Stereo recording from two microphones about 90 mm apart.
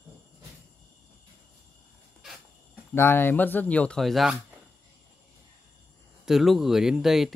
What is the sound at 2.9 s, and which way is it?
Speech, 25° left (ahead or behind).